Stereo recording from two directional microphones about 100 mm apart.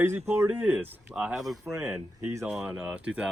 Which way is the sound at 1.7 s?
30° right (ahead or behind).